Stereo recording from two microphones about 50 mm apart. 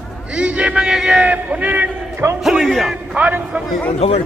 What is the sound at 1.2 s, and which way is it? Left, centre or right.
Speech, right.